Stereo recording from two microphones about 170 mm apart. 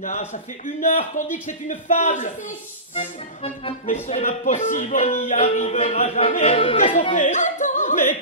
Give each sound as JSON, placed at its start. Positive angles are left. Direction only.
{"t": 0.0, "sound": "music", "side_deg": 45}
{"t": 3.0, "sound": "music", "side_deg": 35}
{"t": 3.8, "sound": "music", "side_deg": 45}
{"t": 6.8, "sound": "music", "side_deg": 45}
{"t": 7.2, "sound": "yodeling", "side_deg": 45}